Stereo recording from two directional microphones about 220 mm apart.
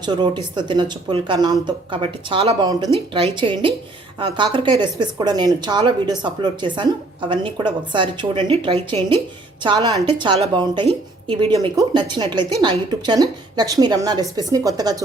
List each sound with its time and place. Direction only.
0.0 s a woman's voice: 20° right (ahead or behind)